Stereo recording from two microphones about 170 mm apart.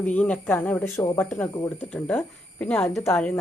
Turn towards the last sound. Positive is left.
turn(degrees=15)  # may be behind; listen again after turning